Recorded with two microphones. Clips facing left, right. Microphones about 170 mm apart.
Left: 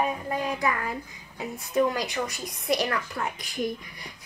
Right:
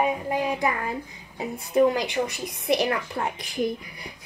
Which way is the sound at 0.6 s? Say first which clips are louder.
Right 2 dB; 30° right (ahead or behind).